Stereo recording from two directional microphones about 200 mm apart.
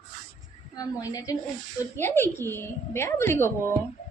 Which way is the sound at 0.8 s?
15° left (ahead or behind).